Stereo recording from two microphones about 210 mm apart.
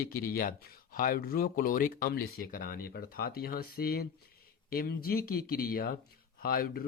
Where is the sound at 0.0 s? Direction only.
45° left (ahead or behind).